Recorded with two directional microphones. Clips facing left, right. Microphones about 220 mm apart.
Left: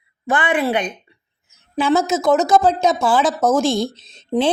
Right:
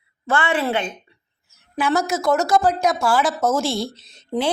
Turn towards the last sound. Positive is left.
turn(degrees=20)  # may be behind; listen again after turning